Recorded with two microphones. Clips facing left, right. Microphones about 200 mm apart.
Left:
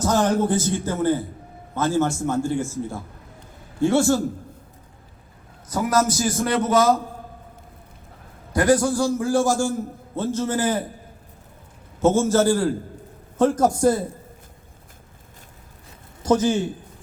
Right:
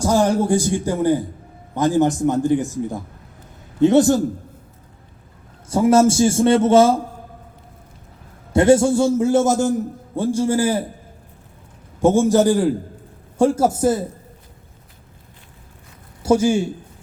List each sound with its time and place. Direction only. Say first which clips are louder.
0.0 s a man's voice: right 3 dB; 10° right (ahead or behind)
5.6 s a man's voice: right 7 dB; 25° right (ahead or behind)
8.5 s a man's voice: right 5 dB; 25° right (ahead or behind)
11.9 s a man's voice: right 3 dB; 15° right (ahead or behind)
16.2 s a man's voice: right 3 dB; 10° right (ahead or behind)